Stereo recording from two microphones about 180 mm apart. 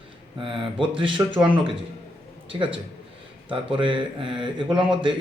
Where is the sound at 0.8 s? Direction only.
25° right (ahead or behind).